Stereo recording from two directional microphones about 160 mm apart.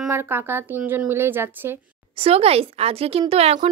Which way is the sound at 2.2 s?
40° right (ahead or behind).